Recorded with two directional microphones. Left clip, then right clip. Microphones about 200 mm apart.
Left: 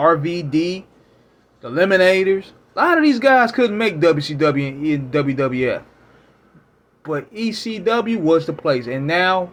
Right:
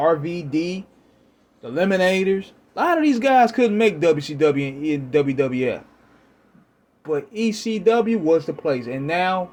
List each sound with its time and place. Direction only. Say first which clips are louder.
0.0 s speech: left 4 dB; 20° right (ahead or behind)
7.0 s speech: right 1 dB; 25° right (ahead or behind)